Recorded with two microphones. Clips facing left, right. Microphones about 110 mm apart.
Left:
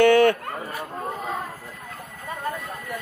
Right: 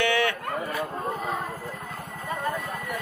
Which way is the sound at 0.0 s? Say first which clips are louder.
Left 9 dB; 45° left (ahead or behind).